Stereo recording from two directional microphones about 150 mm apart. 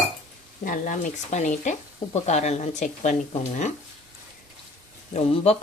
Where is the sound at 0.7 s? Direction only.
60° left (ahead or behind).